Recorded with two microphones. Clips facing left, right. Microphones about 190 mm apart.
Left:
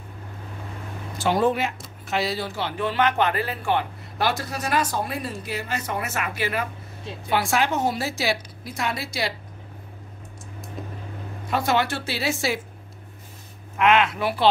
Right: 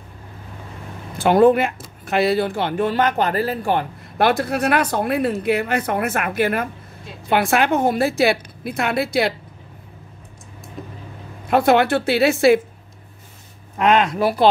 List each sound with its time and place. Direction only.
1.1 s speech: 55° right (ahead or behind)
11.4 s speech: 60° right (ahead or behind)
13.7 s speech: 40° right (ahead or behind)